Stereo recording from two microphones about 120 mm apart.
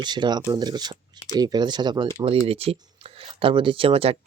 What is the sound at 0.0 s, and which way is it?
Speech, 40° right (ahead or behind).